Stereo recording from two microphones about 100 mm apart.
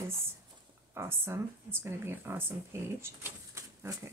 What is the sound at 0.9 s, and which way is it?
Speech, 25° right (ahead or behind).